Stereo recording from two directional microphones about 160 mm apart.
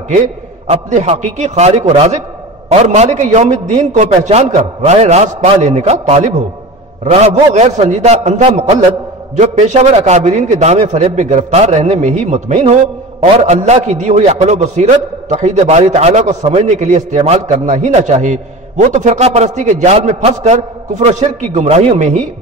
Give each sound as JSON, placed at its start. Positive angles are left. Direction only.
{"t": 0.7, "sound": "a man's voice", "side_deg": -45}